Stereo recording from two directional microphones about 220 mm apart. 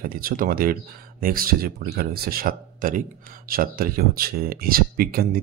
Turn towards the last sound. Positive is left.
turn(degrees=-40)  # may be behind; listen again after turning